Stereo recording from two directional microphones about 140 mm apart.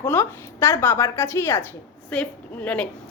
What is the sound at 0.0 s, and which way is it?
A woman's voice, 15° left (ahead or behind).